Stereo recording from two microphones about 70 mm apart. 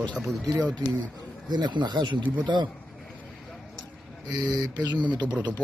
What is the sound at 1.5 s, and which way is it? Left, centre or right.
Speech, right.